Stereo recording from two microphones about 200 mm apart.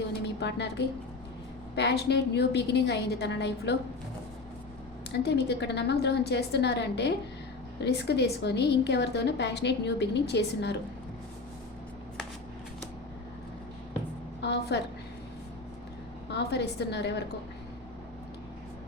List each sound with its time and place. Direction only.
0.2 s a sound: 60° left (ahead or behind)
1.7 s a woman's voice: 60° left (ahead or behind)
5.2 s a woman's voice: 55° left (ahead or behind)
14.4 s a woman's voice: 60° left (ahead or behind)
16.3 s a woman's voice: 55° left (ahead or behind)